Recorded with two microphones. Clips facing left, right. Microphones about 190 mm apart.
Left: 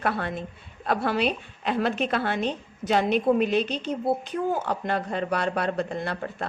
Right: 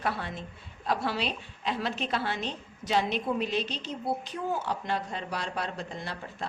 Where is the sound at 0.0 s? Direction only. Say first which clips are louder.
Left 5 dB; 55° left (ahead or behind).